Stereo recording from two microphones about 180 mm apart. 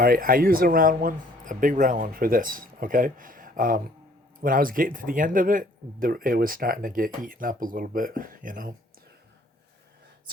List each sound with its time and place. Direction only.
0.0 s speech: 50° right (ahead or behind)